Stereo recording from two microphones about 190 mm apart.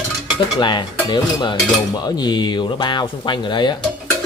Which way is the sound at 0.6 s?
25° left (ahead or behind).